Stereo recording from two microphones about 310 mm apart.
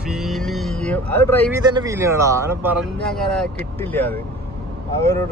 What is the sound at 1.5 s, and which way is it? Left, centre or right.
A man's voice, centre.